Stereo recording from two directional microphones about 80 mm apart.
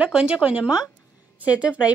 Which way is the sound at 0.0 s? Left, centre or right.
Centre.